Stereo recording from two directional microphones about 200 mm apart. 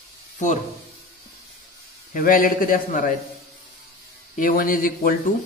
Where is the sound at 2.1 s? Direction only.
45° left (ahead or behind).